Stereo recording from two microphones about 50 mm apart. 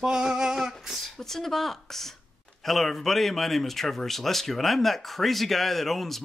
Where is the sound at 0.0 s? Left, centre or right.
Centre.